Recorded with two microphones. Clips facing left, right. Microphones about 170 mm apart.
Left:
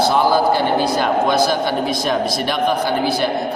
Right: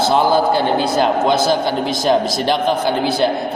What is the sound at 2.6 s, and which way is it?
Speech, 25° right (ahead or behind).